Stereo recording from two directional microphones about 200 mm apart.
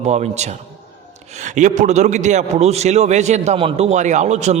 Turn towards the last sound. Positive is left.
turn(degrees=-35)  # may be behind; listen again after turning